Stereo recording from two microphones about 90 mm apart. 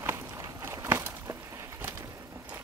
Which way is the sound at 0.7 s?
30° right (ahead or behind).